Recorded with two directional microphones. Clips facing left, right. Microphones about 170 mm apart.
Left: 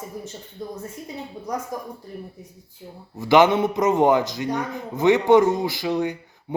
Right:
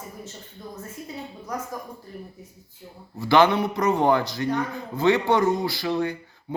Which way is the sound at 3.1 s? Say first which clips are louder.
Left 2 dB; 20° left (ahead or behind).